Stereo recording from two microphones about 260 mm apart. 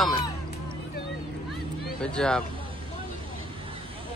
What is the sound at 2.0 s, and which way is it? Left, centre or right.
Speech, centre.